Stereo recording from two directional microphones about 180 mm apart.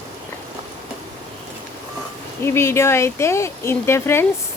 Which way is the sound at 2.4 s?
15° left (ahead or behind).